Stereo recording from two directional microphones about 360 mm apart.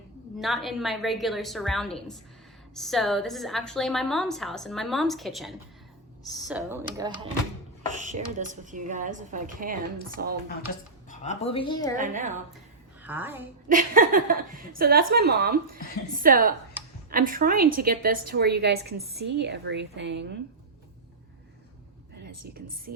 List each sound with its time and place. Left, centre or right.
0.3 s a woman's voice: centre
7.9 s a woman's voice: right
11.1 s a woman's voice: centre
11.9 s a woman's voice: right
13.0 s a woman's voice: centre
13.7 s a woman's voice: right